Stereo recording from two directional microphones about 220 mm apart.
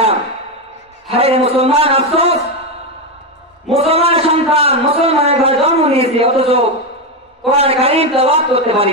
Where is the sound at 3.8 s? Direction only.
25° right (ahead or behind).